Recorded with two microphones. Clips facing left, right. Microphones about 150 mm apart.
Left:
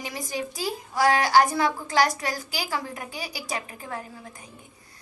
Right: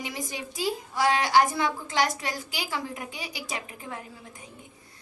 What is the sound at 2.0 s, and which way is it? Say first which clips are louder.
Child singing: left 4 dB; 20° right (ahead or behind).